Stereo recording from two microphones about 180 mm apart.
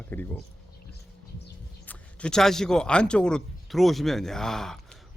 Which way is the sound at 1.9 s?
5° left (ahead or behind).